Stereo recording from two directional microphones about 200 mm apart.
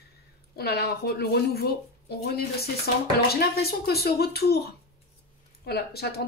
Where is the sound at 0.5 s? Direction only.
50° left (ahead or behind).